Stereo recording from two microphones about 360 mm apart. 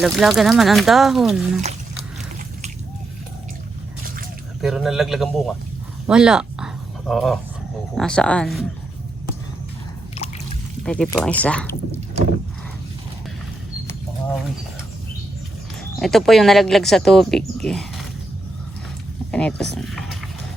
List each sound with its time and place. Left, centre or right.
0.0 s speech: centre
4.6 s speech: centre
10.2 s a sound: centre
10.8 s speech: centre
16.0 s speech: centre
19.3 s speech: centre
19.8 s a sound: centre